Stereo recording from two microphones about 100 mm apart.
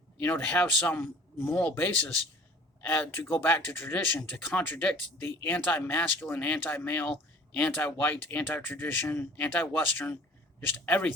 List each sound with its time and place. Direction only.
0.2 s speech: 15° left (ahead or behind)
1.4 s speech: 10° left (ahead or behind)
10.8 s speech: 15° left (ahead or behind)